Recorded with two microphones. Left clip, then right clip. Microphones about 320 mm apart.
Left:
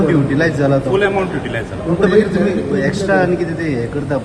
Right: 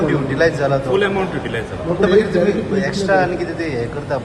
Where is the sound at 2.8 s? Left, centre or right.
Right.